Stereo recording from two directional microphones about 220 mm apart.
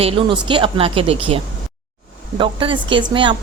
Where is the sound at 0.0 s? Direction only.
25° right (ahead or behind).